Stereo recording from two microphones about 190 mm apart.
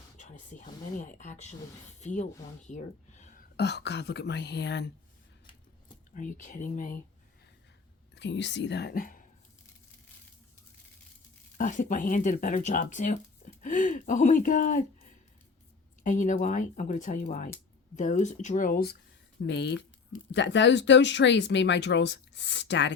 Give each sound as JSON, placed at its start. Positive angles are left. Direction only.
{"t": 0.2, "sound": "speech", "side_deg": 40}
{"t": 2.6, "sound": "a sound", "side_deg": 40}
{"t": 3.6, "sound": "speech", "side_deg": 65}
{"t": 6.1, "sound": "speech", "side_deg": 45}
{"t": 8.1, "sound": "speech", "side_deg": 70}
{"t": 11.5, "sound": "speech", "side_deg": 40}
{"t": 19.5, "sound": "speech", "side_deg": 65}